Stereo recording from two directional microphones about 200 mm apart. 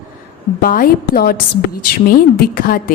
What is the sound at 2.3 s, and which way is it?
Speech, 45° left (ahead or behind).